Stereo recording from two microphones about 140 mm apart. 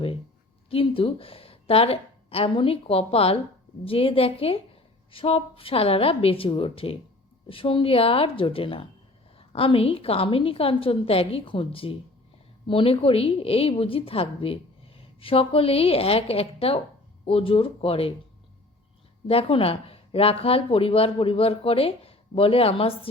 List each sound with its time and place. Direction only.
0.7 s a woman's voice: 40° left (ahead or behind)
19.3 s a woman's voice: 40° left (ahead or behind)